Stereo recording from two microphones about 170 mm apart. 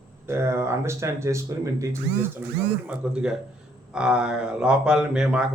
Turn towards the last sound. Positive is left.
turn(degrees=-5)  # may be behind; listen again after turning